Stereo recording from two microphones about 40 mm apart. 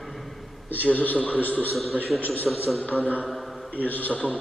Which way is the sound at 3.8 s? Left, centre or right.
Left.